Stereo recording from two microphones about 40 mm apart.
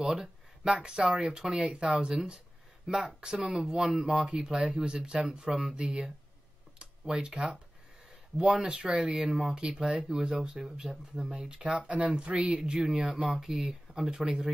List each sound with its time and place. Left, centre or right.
0.0 s speech: centre
6.8 s a sound: right
8.4 s speech: right
13.3 s speech: centre